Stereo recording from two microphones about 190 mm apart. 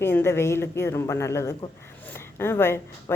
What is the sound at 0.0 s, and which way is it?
Speech, 10° left (ahead or behind).